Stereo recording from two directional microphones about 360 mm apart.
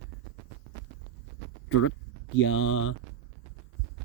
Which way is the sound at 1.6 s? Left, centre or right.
Left.